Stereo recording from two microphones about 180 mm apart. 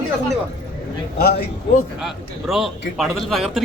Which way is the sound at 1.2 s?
60° left (ahead or behind).